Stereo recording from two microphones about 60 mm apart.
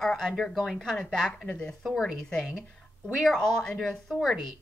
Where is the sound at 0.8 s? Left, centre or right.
Centre.